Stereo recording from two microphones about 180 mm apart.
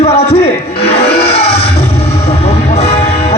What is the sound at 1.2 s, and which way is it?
Music, 35° left (ahead or behind).